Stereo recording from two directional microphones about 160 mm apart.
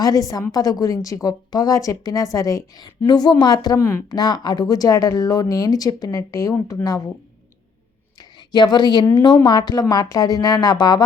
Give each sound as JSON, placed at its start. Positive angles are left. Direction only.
{"t": 0.0, "sound": "a woman's voice", "side_deg": 20}
{"t": 8.2, "sound": "a woman's voice", "side_deg": 25}